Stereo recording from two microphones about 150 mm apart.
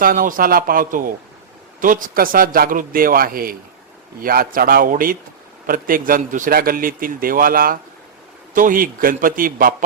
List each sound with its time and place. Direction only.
0.0 s a man's voice: 70° right (ahead or behind)